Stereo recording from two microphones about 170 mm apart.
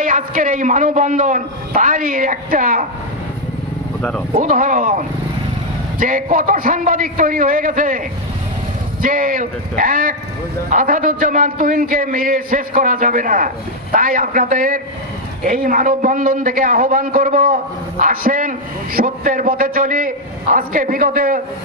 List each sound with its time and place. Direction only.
0.0 s a man's voice: 50° right (ahead or behind)
4.4 s a man's voice: 50° right (ahead or behind)
9.0 s a man's voice: 55° right (ahead or behind)